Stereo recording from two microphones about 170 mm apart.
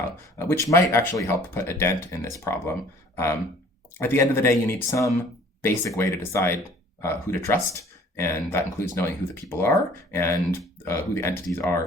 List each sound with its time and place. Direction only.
0.3 s speech: 15° left (ahead or behind)
3.9 s speech: 15° left (ahead or behind)